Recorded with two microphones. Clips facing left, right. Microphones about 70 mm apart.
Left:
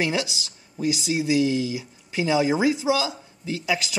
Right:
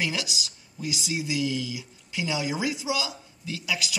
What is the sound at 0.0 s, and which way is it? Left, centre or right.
Speech, left.